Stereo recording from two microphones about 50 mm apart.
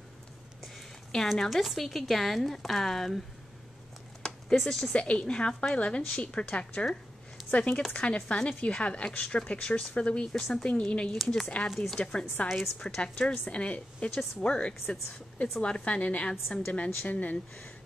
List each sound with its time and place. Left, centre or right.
0.7 s speech: centre
4.6 s speech: centre
4.9 s speech: left
10.3 s a woman's voice: centre
10.6 s a woman's voice: left
11.7 s speech: centre
12.0 s a woman's voice: centre
16.4 s a woman's voice: centre
16.7 s speech: left